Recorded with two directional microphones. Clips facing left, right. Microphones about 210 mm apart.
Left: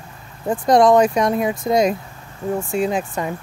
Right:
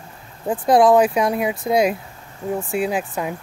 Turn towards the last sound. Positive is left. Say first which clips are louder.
# left 1 dB
turn(degrees=-5)  # may be behind; listen again after turning